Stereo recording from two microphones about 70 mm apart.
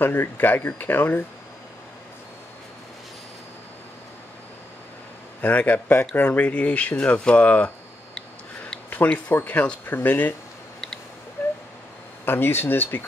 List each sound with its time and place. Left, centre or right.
0.0 s speech: left
5.4 s speech: left
8.9 s speech: left
11.4 s a sound: left
12.3 s speech: left